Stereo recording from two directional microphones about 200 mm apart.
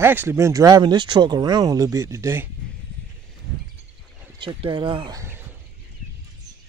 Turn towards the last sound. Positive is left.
turn(degrees=-15)  # may be behind; listen again after turning